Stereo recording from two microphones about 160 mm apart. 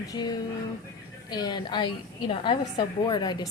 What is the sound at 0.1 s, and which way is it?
A woman's voice, 25° left (ahead or behind).